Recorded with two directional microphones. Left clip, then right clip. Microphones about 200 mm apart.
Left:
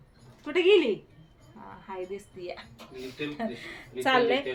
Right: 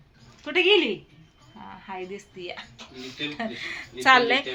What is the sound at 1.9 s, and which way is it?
Speech, 30° right (ahead or behind).